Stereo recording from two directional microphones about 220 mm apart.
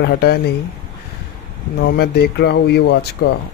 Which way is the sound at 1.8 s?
45° left (ahead or behind).